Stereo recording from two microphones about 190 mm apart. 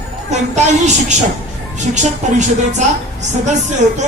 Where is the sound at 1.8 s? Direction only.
40° right (ahead or behind).